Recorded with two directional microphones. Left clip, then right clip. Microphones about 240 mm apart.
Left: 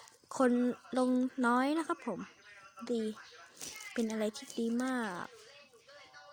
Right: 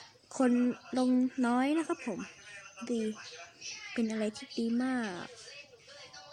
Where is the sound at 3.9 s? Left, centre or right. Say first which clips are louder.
Right 1 dB; centre.